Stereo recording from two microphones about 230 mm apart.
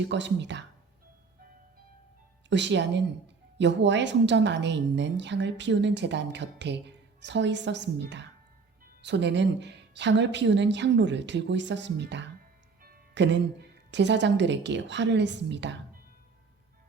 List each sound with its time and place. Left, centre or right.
0.1 s a woman's voice: right
2.5 s a woman's voice: right